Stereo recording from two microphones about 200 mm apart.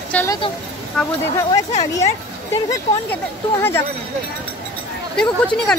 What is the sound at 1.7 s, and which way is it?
Speech, 35° left (ahead or behind).